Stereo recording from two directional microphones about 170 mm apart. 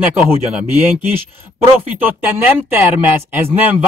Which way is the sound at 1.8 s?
10° right (ahead or behind).